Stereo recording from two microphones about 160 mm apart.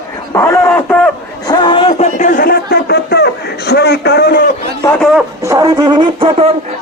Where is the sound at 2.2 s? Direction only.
55° left (ahead or behind); by 4.4 s 80° left.